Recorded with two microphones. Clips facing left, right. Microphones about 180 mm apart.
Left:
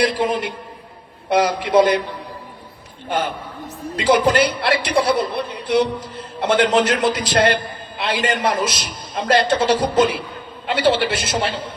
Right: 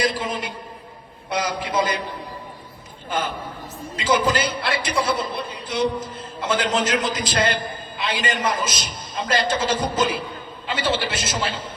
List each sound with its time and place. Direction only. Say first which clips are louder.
0.0 s a man's voice: left 5 dB; 65° left (ahead or behind)
3.9 s a man's voice: left 5 dB; 65° left (ahead or behind)